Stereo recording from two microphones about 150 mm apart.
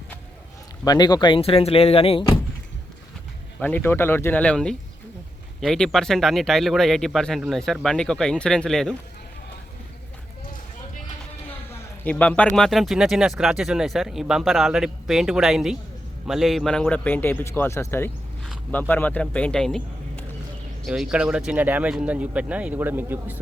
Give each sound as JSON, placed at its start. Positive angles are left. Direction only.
{"t": 0.9, "sound": "speech", "side_deg": 25}
{"t": 3.6, "sound": "a man's voice", "side_deg": 10}
{"t": 11.4, "sound": "a sound", "side_deg": 10}
{"t": 12.5, "sound": "a man's voice", "side_deg": 0}